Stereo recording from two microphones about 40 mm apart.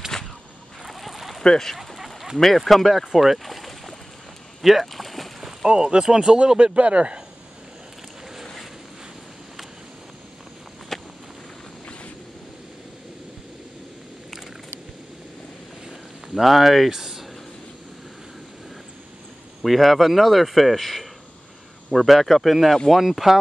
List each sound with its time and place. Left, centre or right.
0.1 s a sound: centre
1.4 s speech: centre
2.3 s speech: centre
4.6 s boat: centre
5.7 s speech: centre
10.9 s walk: centre
15.9 s a sound: centre
19.6 s speech: centre